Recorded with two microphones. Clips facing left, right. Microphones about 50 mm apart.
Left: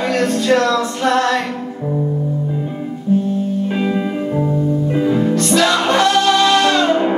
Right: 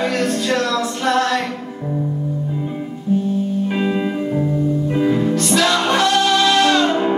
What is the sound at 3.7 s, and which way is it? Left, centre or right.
Music, centre.